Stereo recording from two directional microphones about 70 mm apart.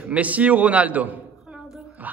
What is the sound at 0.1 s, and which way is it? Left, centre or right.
A man's voice, right.